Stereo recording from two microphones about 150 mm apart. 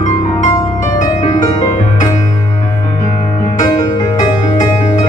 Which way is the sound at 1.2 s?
45° left (ahead or behind).